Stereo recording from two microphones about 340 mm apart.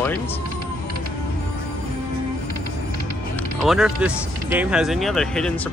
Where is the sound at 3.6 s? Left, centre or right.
Centre.